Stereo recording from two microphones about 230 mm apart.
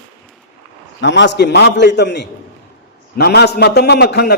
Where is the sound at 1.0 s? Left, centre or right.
Left.